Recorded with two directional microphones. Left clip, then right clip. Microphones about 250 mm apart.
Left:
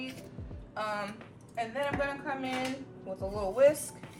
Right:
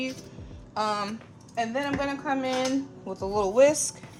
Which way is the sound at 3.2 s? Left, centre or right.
Right.